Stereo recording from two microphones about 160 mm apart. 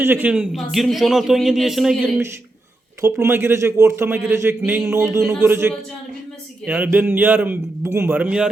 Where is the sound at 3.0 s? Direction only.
15° right (ahead or behind).